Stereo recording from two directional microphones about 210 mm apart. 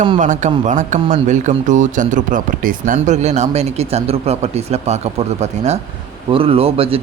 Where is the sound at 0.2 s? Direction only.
35° right (ahead or behind).